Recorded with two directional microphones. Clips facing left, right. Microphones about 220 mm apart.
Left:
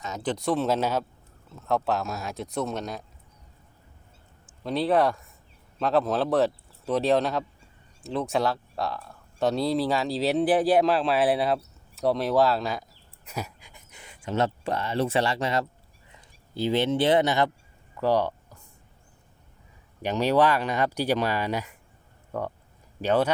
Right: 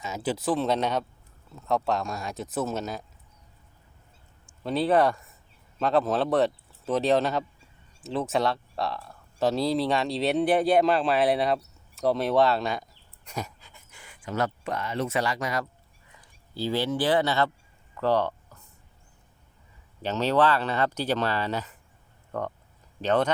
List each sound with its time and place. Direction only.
0.0 s speech: 5° right (ahead or behind)
4.4 s speech: centre (ahead or behind); by 17.5 s 15° left (ahead or behind)
17.9 s a sound: 10° left (ahead or behind)
20.0 s speech: 15° left (ahead or behind)